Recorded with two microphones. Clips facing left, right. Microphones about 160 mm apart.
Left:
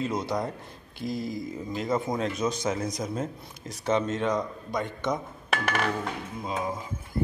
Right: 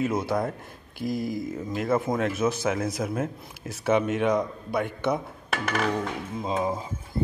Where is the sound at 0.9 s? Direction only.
25° left (ahead or behind).